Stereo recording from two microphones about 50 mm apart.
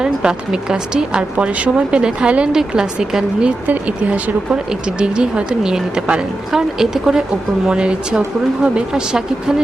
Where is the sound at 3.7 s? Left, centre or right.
Right.